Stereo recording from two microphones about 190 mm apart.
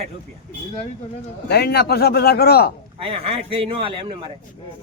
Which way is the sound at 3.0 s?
30° right (ahead or behind).